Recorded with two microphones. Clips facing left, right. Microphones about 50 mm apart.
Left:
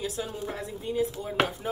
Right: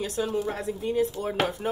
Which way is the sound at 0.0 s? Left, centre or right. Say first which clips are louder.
Right 5 dB; right.